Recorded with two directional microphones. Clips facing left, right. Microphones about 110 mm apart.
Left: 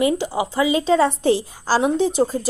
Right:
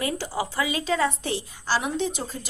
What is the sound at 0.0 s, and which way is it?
A woman's voice, 20° left (ahead or behind).